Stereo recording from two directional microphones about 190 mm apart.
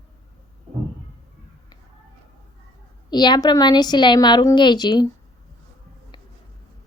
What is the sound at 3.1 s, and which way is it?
Speech, 20° left (ahead or behind).